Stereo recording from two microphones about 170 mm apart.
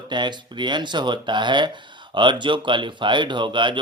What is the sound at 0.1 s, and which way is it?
Speech, 25° right (ahead or behind).